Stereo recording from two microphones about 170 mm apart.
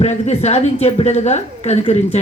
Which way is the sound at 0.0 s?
40° left (ahead or behind).